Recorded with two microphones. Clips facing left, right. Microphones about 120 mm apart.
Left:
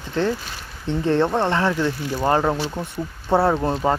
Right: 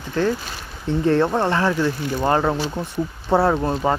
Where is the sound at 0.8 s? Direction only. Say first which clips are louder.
Right 2 dB; 20° left (ahead or behind).